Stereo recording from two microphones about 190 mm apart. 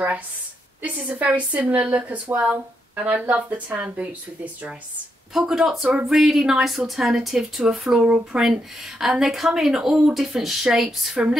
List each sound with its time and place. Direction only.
0.8 s a woman's voice: 5° right (ahead or behind)
5.3 s speech: centre (ahead or behind)